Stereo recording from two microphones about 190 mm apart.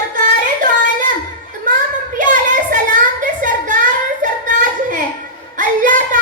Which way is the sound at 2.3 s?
45° right (ahead or behind).